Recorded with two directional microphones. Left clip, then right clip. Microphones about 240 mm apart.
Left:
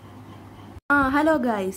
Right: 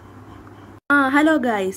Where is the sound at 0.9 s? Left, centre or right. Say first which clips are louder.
Right 3 dB; centre.